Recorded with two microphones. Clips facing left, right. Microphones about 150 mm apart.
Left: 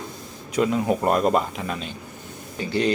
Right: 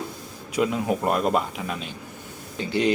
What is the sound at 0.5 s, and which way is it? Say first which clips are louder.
Speech: left 2 dB; 5° right (ahead or behind).